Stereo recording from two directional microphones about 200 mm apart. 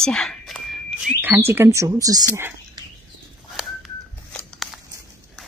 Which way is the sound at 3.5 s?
Centre (ahead or behind).